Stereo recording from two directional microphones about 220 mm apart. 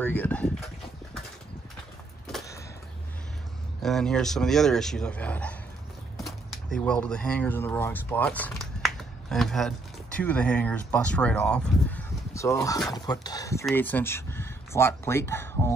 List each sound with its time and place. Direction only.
0.0 s speech: 10° left (ahead or behind)
3.8 s speech: centre (ahead or behind)
6.1 s a sound: centre (ahead or behind)
6.8 s speech: 5° left (ahead or behind)